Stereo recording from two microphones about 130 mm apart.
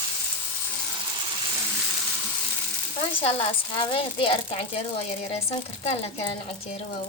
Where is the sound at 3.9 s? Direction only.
45° left (ahead or behind).